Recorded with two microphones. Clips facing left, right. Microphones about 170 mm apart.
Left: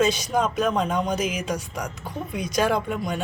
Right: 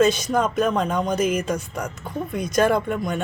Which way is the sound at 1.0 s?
50° right (ahead or behind).